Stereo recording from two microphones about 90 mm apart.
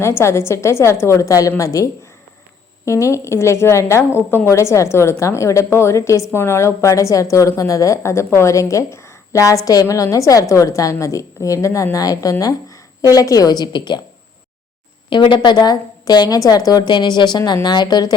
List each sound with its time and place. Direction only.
0.0 s a woman's voice: 30° left (ahead or behind); by 14.0 s 55° left (ahead or behind)
15.1 s a woman's voice: 60° left (ahead or behind)